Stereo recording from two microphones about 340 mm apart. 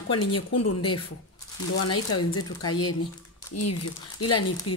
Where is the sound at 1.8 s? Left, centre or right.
Left.